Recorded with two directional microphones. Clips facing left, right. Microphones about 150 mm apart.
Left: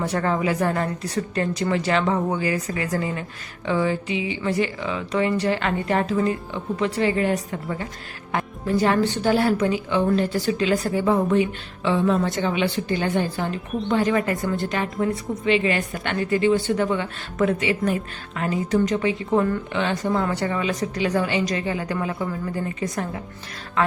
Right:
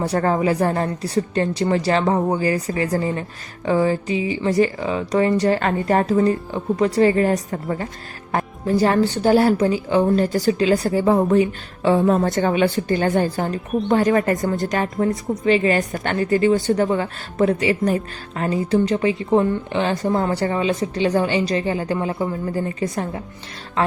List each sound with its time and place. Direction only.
0.0 s a woman's voice: 35° right (ahead or behind)